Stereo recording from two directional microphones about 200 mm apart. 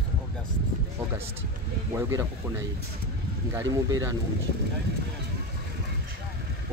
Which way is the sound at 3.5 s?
15° right (ahead or behind).